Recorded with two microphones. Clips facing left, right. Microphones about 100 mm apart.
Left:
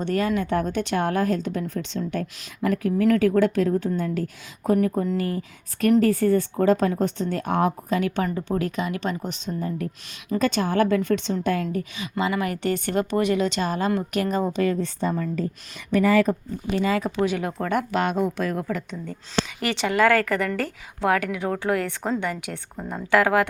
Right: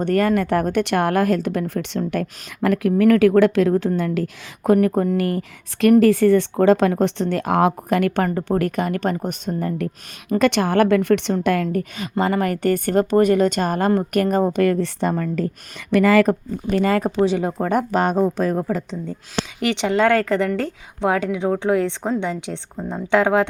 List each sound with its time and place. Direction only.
0.0 s a woman's voice: 55° right (ahead or behind); by 15.4 s 70° right (ahead or behind)
15.9 s a woman's voice: 80° right
16.6 s a woman's voice: 55° right (ahead or behind)
17.2 s a woman's voice: 30° right (ahead or behind)
17.7 s speech: 40° right (ahead or behind)
19.6 s a woman's voice: 20° right (ahead or behind)